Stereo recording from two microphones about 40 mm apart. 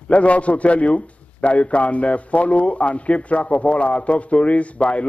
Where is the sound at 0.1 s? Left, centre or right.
Left.